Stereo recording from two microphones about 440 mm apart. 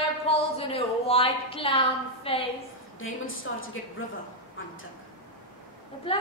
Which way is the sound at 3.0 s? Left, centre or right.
Left.